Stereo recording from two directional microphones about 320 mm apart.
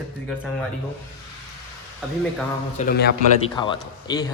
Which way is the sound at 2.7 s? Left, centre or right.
Left.